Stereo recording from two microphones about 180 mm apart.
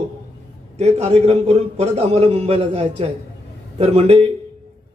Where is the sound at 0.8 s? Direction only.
35° right (ahead or behind).